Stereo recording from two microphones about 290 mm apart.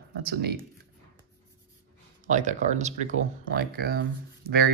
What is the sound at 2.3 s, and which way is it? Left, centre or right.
Speech, right.